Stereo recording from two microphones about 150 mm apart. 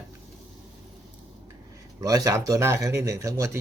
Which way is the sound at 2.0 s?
25° right (ahead or behind).